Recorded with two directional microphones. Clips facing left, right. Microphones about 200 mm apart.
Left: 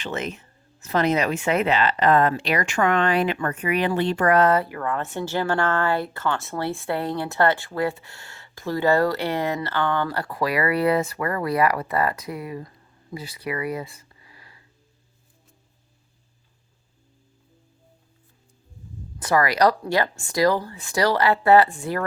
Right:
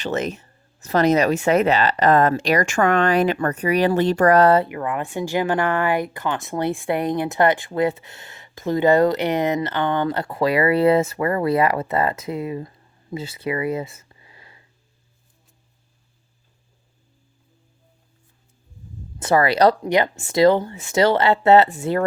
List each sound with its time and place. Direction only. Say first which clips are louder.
0.0 s speech: right 5 dB; 40° right (ahead or behind); by 14.6 s 25° right (ahead or behind)
19.2 s speech: right 3 dB; 25° right (ahead or behind)